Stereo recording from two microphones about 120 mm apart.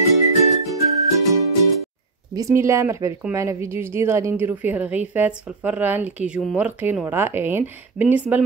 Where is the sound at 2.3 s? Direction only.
25° right (ahead or behind).